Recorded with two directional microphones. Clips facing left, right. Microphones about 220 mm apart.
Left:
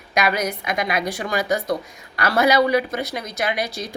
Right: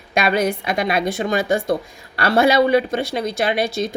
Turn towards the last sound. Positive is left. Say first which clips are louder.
# right 5 dB
turn(degrees=-25)  # may be behind; listen again after turning